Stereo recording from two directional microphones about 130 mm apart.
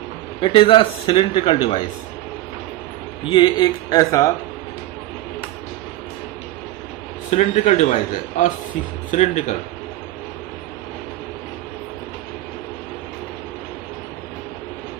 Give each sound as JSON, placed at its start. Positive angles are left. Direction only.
{"t": 0.4, "sound": "a man's voice", "side_deg": 40}
{"t": 3.2, "sound": "a man's voice", "side_deg": 35}
{"t": 7.3, "sound": "a man's voice", "side_deg": 60}
{"t": 9.0, "sound": "a man's voice", "side_deg": 65}